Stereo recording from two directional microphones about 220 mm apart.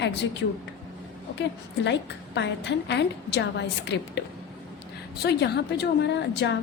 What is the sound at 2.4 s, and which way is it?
A woman's voice, 55° left (ahead or behind).